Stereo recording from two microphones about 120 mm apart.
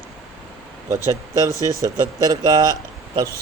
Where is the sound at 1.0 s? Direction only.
25° right (ahead or behind).